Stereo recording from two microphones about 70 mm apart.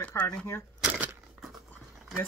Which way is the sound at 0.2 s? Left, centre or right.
Centre.